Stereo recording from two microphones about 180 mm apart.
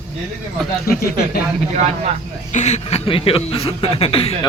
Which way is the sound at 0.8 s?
55° left (ahead or behind).